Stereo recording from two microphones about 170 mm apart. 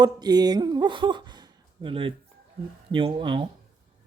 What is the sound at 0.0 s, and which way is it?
Speech, 25° right (ahead or behind).